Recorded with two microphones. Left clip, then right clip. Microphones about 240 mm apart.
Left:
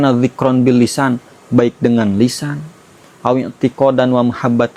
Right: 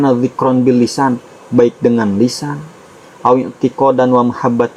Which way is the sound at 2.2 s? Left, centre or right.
Left.